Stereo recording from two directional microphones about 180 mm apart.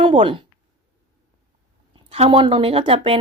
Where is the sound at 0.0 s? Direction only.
30° right (ahead or behind).